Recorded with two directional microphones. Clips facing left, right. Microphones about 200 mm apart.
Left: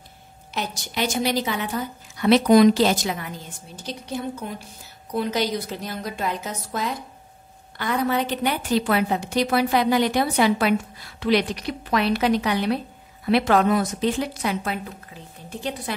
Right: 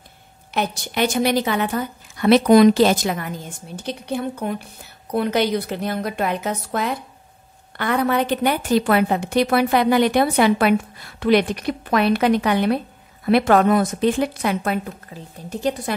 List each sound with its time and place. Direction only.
0.6 s a woman's voice: 60° right (ahead or behind)